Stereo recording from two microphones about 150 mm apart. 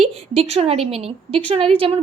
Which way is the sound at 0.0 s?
45° right (ahead or behind).